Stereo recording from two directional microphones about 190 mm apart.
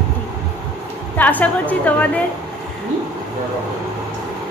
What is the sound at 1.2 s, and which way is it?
Speech, 10° left (ahead or behind).